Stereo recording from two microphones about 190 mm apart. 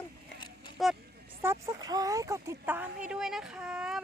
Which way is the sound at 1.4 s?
15° right (ahead or behind).